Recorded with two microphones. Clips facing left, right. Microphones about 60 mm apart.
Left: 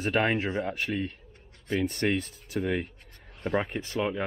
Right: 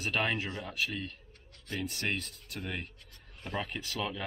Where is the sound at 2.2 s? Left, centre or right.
Right.